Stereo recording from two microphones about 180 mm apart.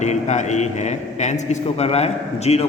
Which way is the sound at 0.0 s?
40° left (ahead or behind).